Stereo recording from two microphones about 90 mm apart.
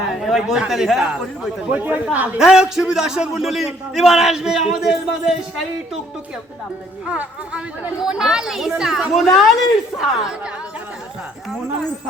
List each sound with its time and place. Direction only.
0.2 s a man's voice: 5° right (ahead or behind)
1.7 s speech: 15° right (ahead or behind)
2.4 s a man's voice: 5° right (ahead or behind)
7.0 s a man's voice: 10° right (ahead or behind)